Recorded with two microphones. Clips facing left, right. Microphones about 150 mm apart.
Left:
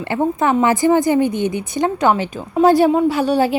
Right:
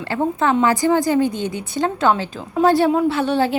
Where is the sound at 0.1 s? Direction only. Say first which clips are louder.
Left 2 dB; 15° left (ahead or behind).